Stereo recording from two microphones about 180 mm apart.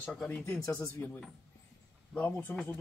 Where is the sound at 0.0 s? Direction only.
5° left (ahead or behind).